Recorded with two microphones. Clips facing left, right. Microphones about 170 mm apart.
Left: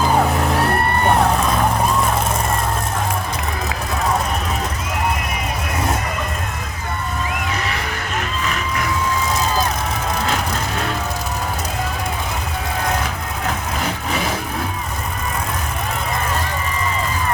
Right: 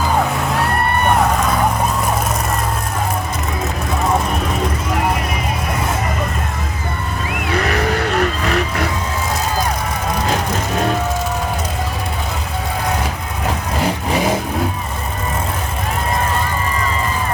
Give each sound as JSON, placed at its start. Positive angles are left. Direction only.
{"t": 8.2, "sound": "vehicle", "side_deg": -35}